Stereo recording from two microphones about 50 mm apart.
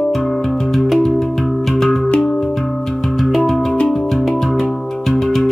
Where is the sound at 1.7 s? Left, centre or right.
Centre.